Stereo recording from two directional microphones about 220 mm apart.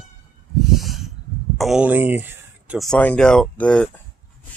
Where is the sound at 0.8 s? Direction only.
Centre (ahead or behind).